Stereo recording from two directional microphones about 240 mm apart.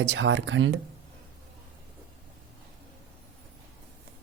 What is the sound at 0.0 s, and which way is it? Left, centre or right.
Speech, right.